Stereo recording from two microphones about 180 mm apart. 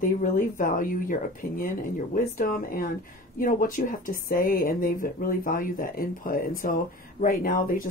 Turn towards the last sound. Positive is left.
turn(degrees=50)  # may be behind; listen again after turning